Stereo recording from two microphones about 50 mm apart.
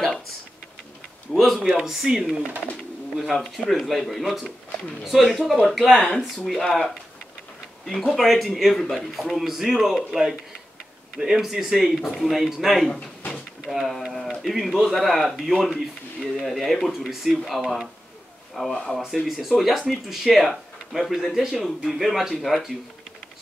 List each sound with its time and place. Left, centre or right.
1.3 s speech: centre
1.8 s speech: centre
8.1 s speech: centre
11.4 s speech: centre